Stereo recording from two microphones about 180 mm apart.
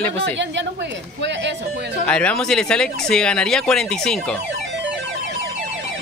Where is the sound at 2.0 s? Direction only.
5° left (ahead or behind).